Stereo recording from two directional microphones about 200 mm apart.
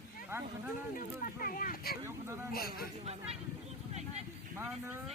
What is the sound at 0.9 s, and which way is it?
Speech, 45° left (ahead or behind).